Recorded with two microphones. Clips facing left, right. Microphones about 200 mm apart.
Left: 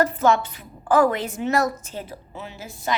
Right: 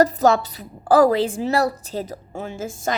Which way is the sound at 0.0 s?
40° right (ahead or behind).